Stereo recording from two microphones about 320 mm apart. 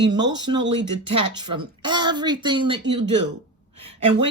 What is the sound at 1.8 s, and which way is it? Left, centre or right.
Speech, centre.